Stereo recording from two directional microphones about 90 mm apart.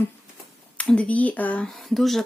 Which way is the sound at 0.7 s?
15° left (ahead or behind).